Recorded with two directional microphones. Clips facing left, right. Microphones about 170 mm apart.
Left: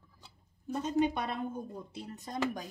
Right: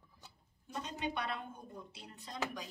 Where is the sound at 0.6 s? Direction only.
45° left (ahead or behind).